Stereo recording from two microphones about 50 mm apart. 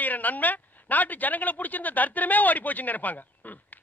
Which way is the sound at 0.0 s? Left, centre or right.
Left.